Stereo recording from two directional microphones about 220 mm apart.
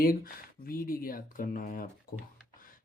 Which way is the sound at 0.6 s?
40° left (ahead or behind).